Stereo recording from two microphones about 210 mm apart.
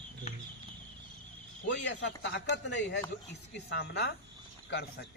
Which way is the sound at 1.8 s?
60° left (ahead or behind).